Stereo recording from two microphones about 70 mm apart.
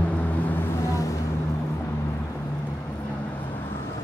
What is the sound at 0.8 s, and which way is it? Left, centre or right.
Vehicle, left.